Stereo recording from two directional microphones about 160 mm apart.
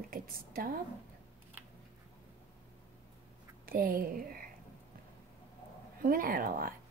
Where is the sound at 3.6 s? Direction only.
65° right (ahead or behind).